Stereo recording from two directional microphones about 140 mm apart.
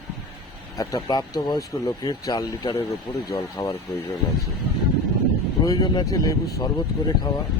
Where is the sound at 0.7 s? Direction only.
25° left (ahead or behind).